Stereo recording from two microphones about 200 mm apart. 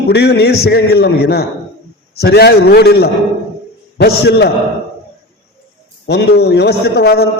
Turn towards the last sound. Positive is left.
turn(degrees=50)  # may be behind; listen again after turning